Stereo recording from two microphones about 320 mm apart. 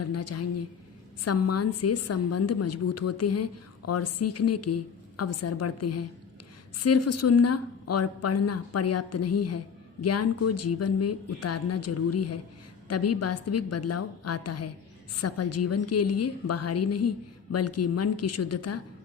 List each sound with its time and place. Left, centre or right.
0.0 s a woman's voice: left